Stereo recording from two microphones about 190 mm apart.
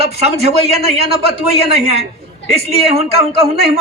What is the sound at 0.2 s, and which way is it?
Speech, 35° right (ahead or behind).